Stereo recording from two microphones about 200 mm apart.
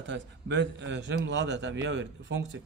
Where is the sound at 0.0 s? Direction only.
65° right (ahead or behind).